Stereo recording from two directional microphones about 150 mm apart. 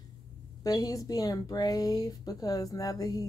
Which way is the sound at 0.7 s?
25° left (ahead or behind).